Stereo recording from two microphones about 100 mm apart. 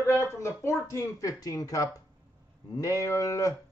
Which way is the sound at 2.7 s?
35° left (ahead or behind).